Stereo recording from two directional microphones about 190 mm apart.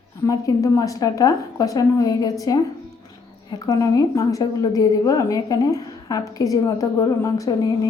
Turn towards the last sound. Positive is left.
turn(degrees=20)  # may be behind; listen again after turning